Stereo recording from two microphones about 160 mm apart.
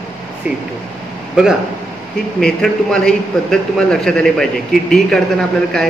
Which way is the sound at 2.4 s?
5° left (ahead or behind).